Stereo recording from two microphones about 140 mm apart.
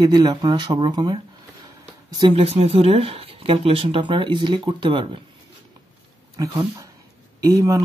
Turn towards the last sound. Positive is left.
turn(degrees=-25)  # may be behind; listen again after turning